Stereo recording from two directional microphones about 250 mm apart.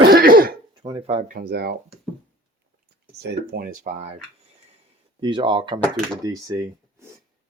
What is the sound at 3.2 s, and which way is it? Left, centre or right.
Speech, right.